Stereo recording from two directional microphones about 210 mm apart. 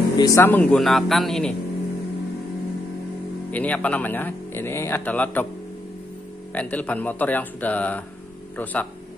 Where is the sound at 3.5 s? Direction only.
5° left (ahead or behind).